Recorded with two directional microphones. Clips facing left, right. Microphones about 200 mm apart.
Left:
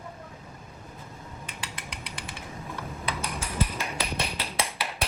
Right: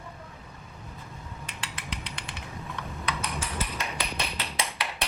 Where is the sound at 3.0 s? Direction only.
Centre (ahead or behind).